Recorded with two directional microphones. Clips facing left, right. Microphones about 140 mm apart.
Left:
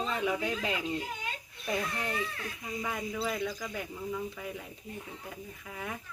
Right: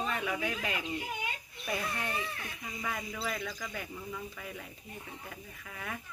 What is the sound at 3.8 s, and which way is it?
A child's voice, 15° left (ahead or behind).